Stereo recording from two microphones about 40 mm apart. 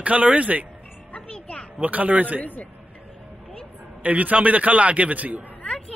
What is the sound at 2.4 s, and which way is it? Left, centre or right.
Speech, left.